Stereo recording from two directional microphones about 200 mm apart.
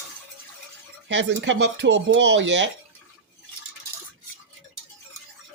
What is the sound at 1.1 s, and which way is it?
Speech, 65° right (ahead or behind).